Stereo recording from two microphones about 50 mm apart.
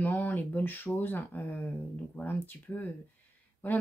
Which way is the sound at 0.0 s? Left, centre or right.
Left.